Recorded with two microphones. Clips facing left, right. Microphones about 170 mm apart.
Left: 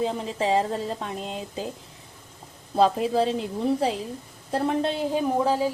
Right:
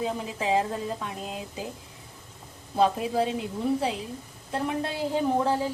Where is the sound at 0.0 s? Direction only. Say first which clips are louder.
Left 4 dB; 30° left (ahead or behind).